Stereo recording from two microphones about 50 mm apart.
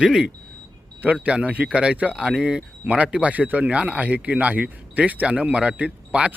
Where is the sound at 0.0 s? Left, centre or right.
Centre.